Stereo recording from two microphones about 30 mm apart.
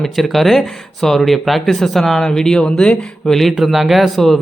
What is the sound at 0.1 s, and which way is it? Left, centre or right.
Speech, centre.